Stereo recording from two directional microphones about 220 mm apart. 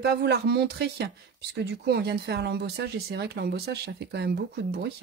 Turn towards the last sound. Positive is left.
turn(degrees=-50)  # may be behind; listen again after turning